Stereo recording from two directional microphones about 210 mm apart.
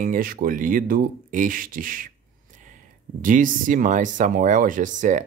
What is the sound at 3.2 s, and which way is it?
Speech, 40° right (ahead or behind).